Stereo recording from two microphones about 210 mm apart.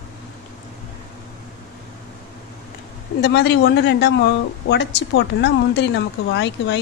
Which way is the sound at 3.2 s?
55° left (ahead or behind).